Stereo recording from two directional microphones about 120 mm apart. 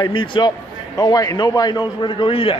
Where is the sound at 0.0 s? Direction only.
40° left (ahead or behind).